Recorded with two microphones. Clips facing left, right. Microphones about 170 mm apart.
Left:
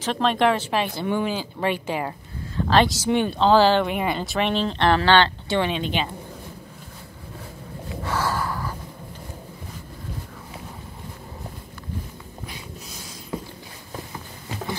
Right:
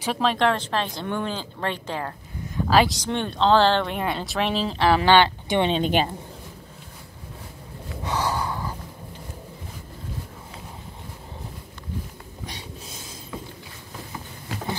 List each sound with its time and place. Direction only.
0.0 s speech: 5° right (ahead or behind)
2.5 s speech: 5° right (ahead or behind)
3.0 s speech: 5° left (ahead or behind); by 5.7 s 15° right (ahead or behind)
5.8 s a woman's voice: 45° right (ahead or behind)
8.0 s snort: 20° right (ahead or behind)
12.4 s a sound: 35° right (ahead or behind)
13.3 s walk: 30° left (ahead or behind)